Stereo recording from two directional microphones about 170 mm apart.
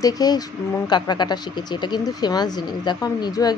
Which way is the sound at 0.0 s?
20° left (ahead or behind).